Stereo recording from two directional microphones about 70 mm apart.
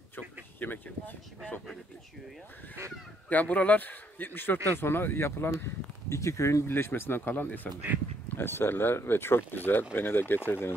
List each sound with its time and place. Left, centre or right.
0.1 s speech: left
2.8 s speech: right
3.3 s a man's voice: left
5.6 s speech: left